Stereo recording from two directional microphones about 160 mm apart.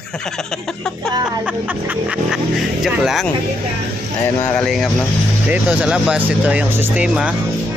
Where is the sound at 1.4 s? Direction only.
10° right (ahead or behind).